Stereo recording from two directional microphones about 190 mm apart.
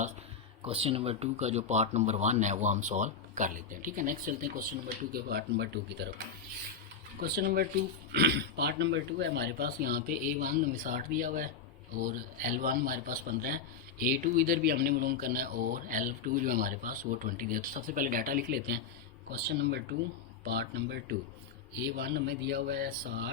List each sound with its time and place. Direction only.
0.6 s speech: 30° right (ahead or behind); by 4.6 s 45° right (ahead or behind)
5.1 s speech: 60° right (ahead or behind)
7.2 s speech: 55° right (ahead or behind)
19.3 s speech: 60° right (ahead or behind)